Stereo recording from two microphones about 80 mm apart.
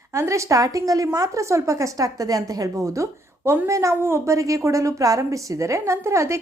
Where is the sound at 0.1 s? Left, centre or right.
Right.